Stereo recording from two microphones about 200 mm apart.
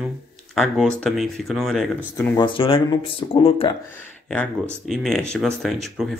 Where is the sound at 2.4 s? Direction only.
25° left (ahead or behind).